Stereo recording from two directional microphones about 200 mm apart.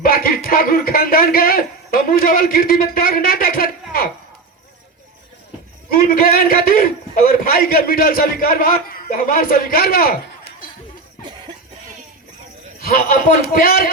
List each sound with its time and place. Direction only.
0.0 s a man's voice: 50° left (ahead or behind)
5.9 s a man's voice: 50° left (ahead or behind)
12.8 s a man's voice: 45° left (ahead or behind)